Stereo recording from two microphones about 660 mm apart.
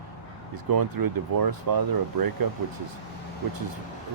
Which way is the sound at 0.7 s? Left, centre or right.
Right.